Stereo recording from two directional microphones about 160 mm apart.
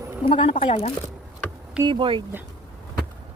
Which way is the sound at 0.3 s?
35° left (ahead or behind).